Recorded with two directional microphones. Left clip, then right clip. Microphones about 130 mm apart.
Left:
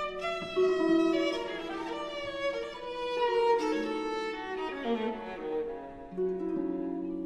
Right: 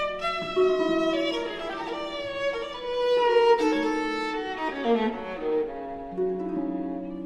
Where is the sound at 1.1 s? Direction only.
25° right (ahead or behind); by 5.9 s 40° right (ahead or behind).